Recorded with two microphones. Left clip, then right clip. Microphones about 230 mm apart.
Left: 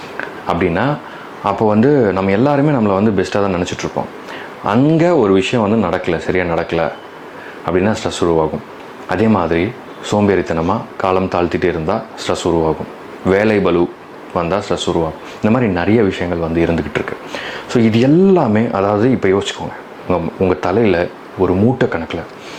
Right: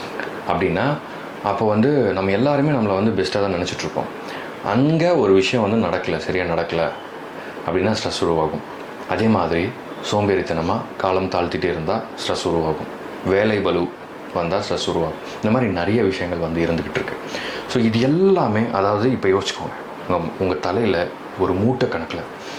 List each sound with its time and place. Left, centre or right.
0.4 s speech: left